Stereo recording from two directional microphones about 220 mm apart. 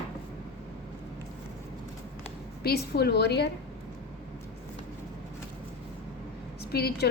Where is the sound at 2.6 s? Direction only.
45° left (ahead or behind).